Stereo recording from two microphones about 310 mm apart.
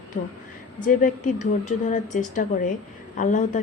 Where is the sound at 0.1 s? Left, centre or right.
Left.